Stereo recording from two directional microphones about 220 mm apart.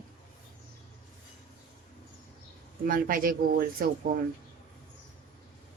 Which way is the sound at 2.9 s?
40° right (ahead or behind).